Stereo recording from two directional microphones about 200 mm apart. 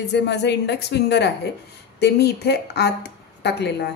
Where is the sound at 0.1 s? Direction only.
60° left (ahead or behind).